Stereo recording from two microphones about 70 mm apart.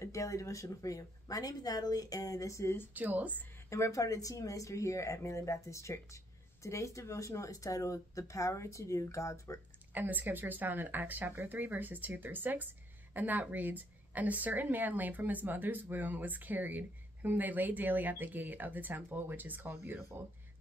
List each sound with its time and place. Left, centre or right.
0.0 s speech: left
2.9 s a woman's voice: right
3.7 s speech: left
9.9 s a woman's voice: right